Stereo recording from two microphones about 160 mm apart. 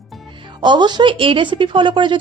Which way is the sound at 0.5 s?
30° right (ahead or behind).